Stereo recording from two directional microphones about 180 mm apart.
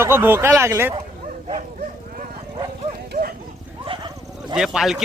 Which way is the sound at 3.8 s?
30° right (ahead or behind).